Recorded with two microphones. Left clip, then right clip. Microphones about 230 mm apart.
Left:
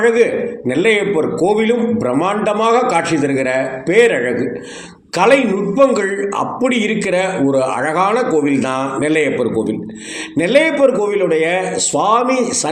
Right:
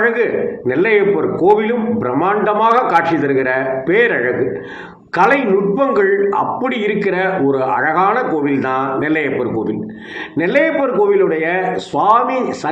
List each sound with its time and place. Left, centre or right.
0.0 s a man's voice: left